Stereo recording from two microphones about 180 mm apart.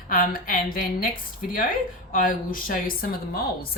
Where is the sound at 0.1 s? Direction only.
55° left (ahead or behind).